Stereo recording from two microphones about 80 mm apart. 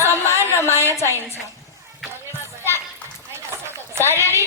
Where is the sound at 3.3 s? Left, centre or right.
Right.